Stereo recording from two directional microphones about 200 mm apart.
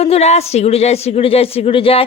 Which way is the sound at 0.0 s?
30° left (ahead or behind).